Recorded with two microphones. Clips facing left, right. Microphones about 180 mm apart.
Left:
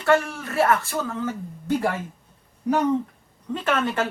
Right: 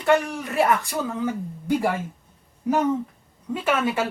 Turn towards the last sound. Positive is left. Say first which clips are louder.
# right 1 dB
turn(degrees=-10)  # may be behind; listen again after turning